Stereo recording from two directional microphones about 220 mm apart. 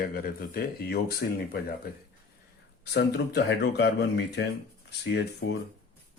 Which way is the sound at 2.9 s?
50° left (ahead or behind).